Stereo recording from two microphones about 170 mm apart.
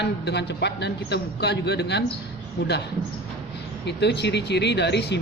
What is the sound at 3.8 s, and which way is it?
Speech, 80° left.